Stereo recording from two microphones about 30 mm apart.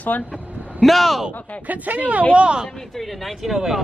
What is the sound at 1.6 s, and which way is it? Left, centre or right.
Speech, right.